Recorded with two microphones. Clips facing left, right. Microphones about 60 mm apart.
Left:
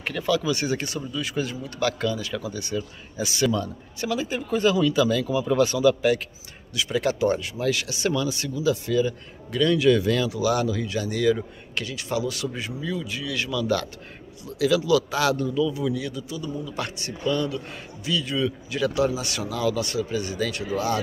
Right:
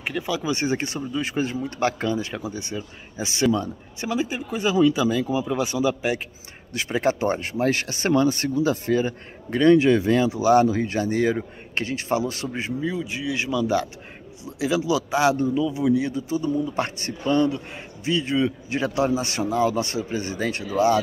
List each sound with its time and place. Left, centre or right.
0.0 s speech: centre
6.7 s speech: right